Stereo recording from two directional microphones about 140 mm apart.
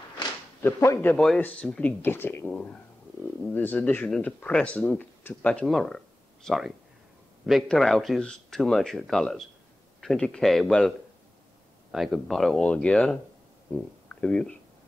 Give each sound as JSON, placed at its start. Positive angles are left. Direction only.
{"t": 0.6, "sound": "speech", "side_deg": 15}
{"t": 1.1, "sound": "speech", "side_deg": 5}
{"t": 11.9, "sound": "speech", "side_deg": 0}